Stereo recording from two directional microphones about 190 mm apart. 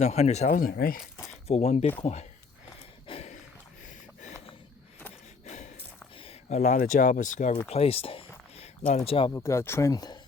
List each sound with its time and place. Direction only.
0.0 s speech: 35° left (ahead or behind)
1.3 s speech: 35° left (ahead or behind)
3.1 s a sound: 30° left (ahead or behind)
5.5 s gasp: 40° left (ahead or behind)
6.1 s speech: 35° left (ahead or behind)
7.7 s a sound: 30° left (ahead or behind)
8.9 s speech: 30° left (ahead or behind)
9.3 s speech: 15° left (ahead or behind)